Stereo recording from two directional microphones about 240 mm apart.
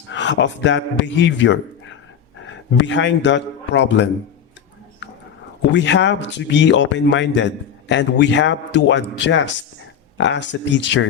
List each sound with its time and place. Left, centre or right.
0.1 s speech: left
2.7 s speech: left
5.7 s speech: left